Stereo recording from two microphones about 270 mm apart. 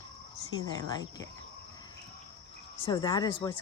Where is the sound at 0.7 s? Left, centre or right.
Centre.